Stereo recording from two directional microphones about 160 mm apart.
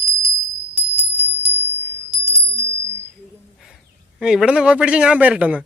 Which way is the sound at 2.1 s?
40° right (ahead or behind).